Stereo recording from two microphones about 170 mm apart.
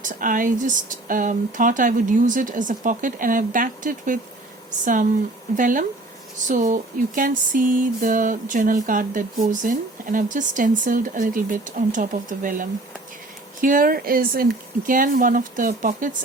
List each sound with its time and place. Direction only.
0.0 s speech: 50° right (ahead or behind)
5.5 s speech: 50° right (ahead or behind)